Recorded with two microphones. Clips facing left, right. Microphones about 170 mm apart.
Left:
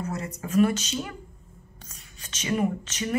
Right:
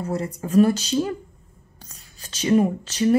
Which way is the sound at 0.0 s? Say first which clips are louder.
Right 5 dB; 30° right (ahead or behind).